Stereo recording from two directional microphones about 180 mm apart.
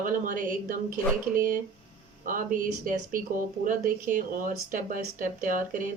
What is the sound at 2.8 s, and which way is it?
Speech, 50° right (ahead or behind).